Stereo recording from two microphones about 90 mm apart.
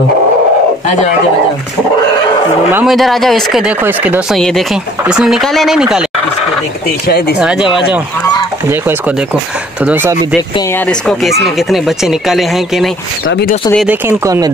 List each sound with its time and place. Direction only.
2.8 s speech: centre (ahead or behind)
3.8 s speech: 20° right (ahead or behind)
4.4 s speech: 5° left (ahead or behind)
5.0 s speech: 5° right (ahead or behind)
5.8 s fowl: 5° right (ahead or behind)
7.3 s fowl: 10° right (ahead or behind)
8.6 s speech: 25° right (ahead or behind)
10.9 s speech: centre (ahead or behind)
14.0 s speech: 35° right (ahead or behind)